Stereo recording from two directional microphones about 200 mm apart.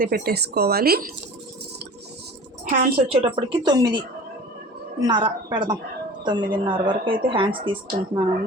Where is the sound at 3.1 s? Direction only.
30° right (ahead or behind).